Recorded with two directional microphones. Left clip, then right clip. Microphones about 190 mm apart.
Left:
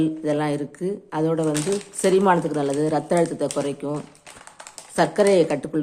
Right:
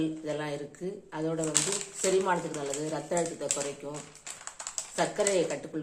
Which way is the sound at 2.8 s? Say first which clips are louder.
Left 10 dB; 40° left (ahead or behind).